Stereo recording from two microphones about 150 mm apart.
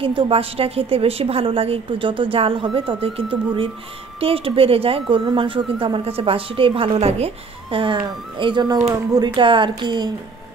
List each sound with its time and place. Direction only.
0.0 s a woman's voice: 35° right (ahead or behind)